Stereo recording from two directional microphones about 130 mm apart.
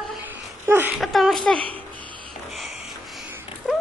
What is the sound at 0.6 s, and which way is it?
Speech, 15° right (ahead or behind).